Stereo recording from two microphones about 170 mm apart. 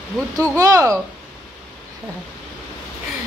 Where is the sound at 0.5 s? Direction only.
20° right (ahead or behind).